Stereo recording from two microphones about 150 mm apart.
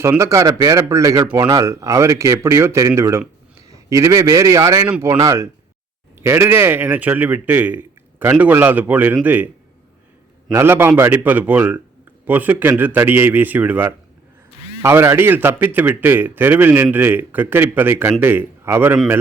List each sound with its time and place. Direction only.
0.0 s a man's voice: 20° right (ahead or behind)
10.5 s a man's voice: 15° right (ahead or behind)